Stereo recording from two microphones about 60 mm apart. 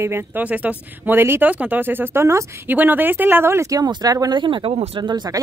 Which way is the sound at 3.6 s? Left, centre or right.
Right.